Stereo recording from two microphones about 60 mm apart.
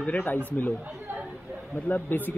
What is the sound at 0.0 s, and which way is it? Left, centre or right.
Speech, left.